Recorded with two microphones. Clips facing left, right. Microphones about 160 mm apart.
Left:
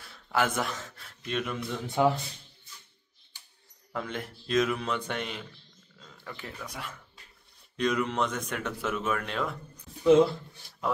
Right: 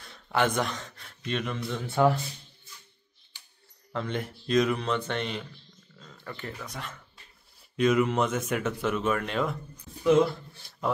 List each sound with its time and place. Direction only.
0.0 s a man's voice: 5° left (ahead or behind)
1.9 s speech: 15° left (ahead or behind)
3.9 s speech: 5° left (ahead or behind)
7.7 s speech: 5° right (ahead or behind)